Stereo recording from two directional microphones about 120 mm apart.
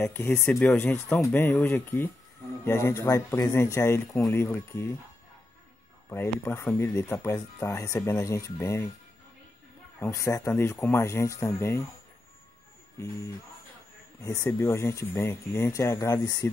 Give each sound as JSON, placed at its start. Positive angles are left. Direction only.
{"t": 0.0, "sound": "speech", "side_deg": 15}
{"t": 6.0, "sound": "speech", "side_deg": 20}
{"t": 9.9, "sound": "speech", "side_deg": 25}
{"t": 14.2, "sound": "speech", "side_deg": 25}